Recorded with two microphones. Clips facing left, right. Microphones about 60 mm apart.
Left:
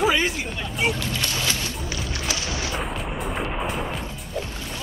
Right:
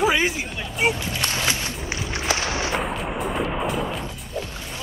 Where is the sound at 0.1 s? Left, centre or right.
Centre.